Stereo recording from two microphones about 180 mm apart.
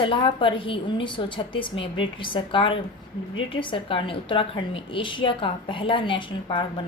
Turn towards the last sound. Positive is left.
turn(degrees=30)  # may be behind; listen again after turning